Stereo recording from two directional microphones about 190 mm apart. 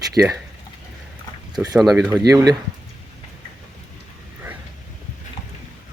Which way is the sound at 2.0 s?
15° right (ahead or behind).